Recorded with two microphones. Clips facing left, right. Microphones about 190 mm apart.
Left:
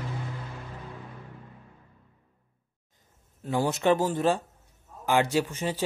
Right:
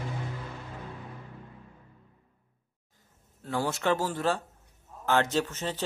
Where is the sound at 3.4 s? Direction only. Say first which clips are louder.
Left 4 dB; 20° left (ahead or behind).